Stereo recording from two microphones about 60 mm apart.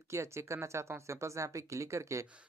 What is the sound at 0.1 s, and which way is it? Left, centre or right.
A woman's voice, right.